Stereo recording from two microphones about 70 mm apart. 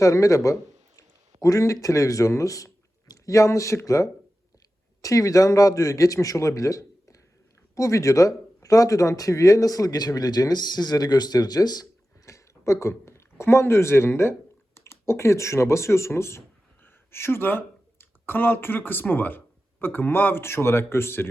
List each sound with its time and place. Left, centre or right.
0.0 s speech: left
12.2 s chewing: left
13.4 s speech: left